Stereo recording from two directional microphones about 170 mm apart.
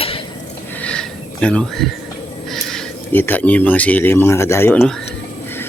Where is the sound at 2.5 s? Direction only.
Centre (ahead or behind).